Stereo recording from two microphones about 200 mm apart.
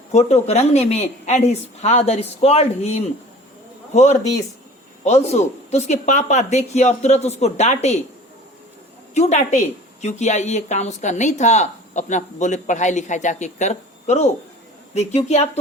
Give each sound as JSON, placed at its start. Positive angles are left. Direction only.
{"t": 0.1, "sound": "speech", "side_deg": 35}
{"t": 9.1, "sound": "speech", "side_deg": 35}